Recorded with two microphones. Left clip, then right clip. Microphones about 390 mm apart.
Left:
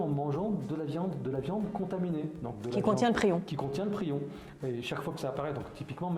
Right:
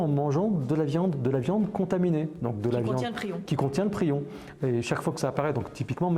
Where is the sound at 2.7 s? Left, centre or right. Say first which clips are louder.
Left 1 dB; left.